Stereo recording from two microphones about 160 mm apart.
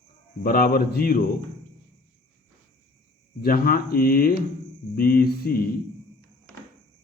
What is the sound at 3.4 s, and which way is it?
A man's voice, 65° left (ahead or behind).